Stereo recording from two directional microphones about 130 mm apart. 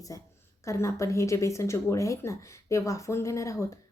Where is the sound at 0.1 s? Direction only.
25° left (ahead or behind).